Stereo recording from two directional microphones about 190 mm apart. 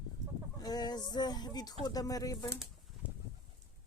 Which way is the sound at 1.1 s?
20° left (ahead or behind).